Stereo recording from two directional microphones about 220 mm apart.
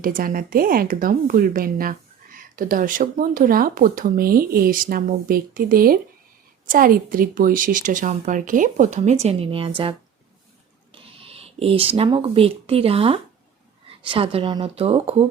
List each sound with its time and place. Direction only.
0.0 s speech: 40° right (ahead or behind); by 9.9 s 25° right (ahead or behind)
10.9 s speech: 25° right (ahead or behind)